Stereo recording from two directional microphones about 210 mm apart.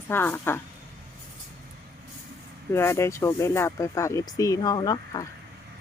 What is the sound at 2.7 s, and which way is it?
Speech, 10° left (ahead or behind).